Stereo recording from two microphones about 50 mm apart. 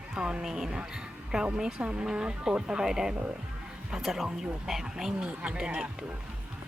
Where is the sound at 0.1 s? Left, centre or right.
Centre.